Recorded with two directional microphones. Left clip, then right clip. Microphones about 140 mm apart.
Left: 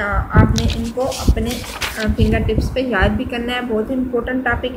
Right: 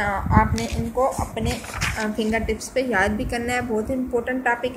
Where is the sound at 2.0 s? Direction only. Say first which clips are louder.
Left 5 dB; 50° right (ahead or behind).